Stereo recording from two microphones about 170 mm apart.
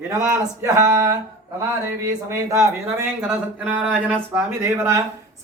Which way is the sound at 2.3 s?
15° right (ahead or behind).